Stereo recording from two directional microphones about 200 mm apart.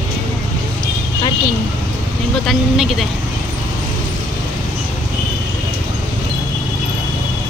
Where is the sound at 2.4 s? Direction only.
Centre (ahead or behind).